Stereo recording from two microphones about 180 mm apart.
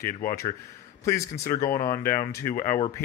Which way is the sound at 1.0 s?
15° left (ahead or behind).